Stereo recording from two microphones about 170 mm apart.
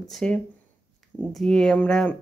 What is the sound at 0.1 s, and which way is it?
Speech, 5° left (ahead or behind).